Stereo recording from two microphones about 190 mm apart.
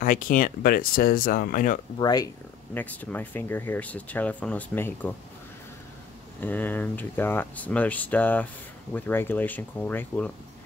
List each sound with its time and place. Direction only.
0.0 s speech: 45° left (ahead or behind)
2.0 s speech: 20° left (ahead or behind)
6.4 s speech: 10° left (ahead or behind)